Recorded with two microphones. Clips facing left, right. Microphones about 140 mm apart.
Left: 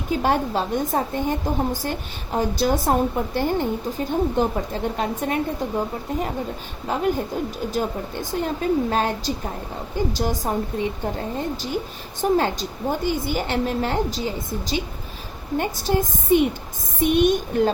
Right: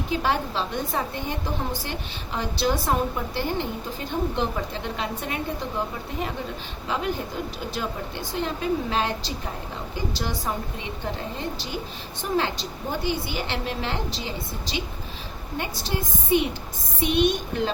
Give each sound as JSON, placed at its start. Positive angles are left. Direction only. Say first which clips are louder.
{"t": 0.1, "sound": "a woman's voice", "louder": "left 5 dB", "side_deg": 45}
{"t": 6.9, "sound": "a woman's voice", "louder": "left 5 dB", "side_deg": 45}